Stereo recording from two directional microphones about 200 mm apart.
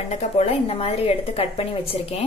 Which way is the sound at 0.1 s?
30° left (ahead or behind).